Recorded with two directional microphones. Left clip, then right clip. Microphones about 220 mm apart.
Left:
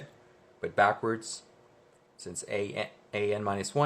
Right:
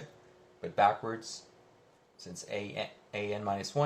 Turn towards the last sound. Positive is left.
turn(degrees=45)  # may be behind; listen again after turning